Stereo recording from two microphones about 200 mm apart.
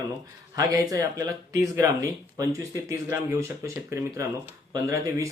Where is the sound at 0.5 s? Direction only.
15° right (ahead or behind).